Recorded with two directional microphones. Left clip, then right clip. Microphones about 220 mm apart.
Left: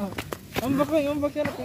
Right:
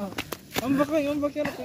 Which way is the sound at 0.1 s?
35° right (ahead or behind).